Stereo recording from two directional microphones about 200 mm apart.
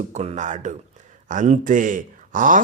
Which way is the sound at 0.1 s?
35° right (ahead or behind).